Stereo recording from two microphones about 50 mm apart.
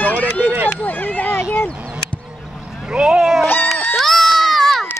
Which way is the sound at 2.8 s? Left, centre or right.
Centre.